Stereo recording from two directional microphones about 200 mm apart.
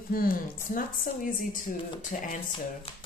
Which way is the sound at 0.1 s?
45° left (ahead or behind).